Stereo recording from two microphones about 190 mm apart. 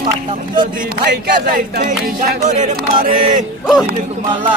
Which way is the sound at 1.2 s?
50° right (ahead or behind).